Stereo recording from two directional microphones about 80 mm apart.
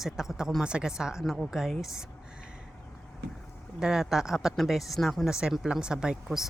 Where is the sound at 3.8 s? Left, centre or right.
Centre.